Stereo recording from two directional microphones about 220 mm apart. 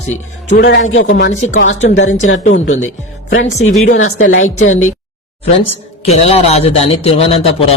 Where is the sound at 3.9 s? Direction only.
65° left (ahead or behind).